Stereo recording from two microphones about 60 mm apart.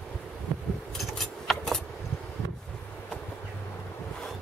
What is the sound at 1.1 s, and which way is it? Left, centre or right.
Keys jangling, centre.